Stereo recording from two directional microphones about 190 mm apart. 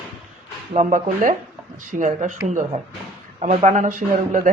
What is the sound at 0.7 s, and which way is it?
Speech, 40° right (ahead or behind).